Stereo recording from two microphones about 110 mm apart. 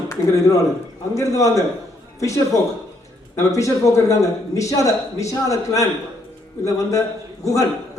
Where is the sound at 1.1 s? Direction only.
30° left (ahead or behind).